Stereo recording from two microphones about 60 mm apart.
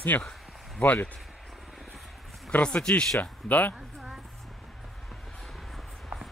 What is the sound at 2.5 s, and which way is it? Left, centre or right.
Speech, left.